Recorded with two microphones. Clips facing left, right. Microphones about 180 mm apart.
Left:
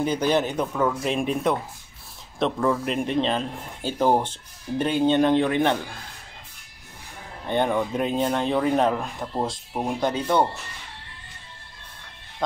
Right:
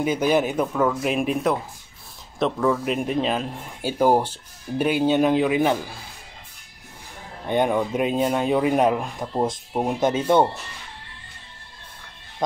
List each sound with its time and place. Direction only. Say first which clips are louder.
0.0 s speech: right 2 dB; 5° right (ahead or behind)
7.4 s speech: right 2 dB; 10° right (ahead or behind)